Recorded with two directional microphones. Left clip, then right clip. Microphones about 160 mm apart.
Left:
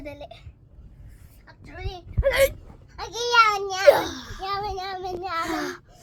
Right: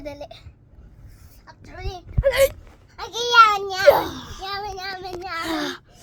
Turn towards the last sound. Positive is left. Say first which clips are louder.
# right 2 dB
turn(degrees=-20)  # may be behind; listen again after turning